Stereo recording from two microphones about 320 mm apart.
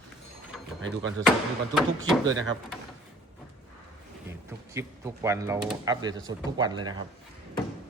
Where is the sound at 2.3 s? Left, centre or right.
Right.